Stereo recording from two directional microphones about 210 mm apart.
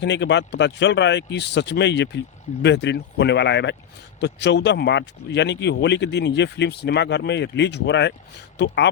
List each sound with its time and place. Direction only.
0.0 s speech: 55° left (ahead or behind)